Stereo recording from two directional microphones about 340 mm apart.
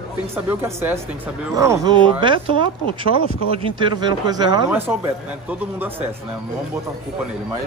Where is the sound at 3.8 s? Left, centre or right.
Centre.